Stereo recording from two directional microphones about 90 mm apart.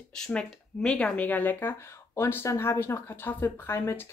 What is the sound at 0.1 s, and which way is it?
Speech, 10° left (ahead or behind).